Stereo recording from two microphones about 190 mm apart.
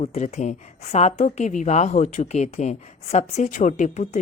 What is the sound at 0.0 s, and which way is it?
A woman's voice, 35° left (ahead or behind).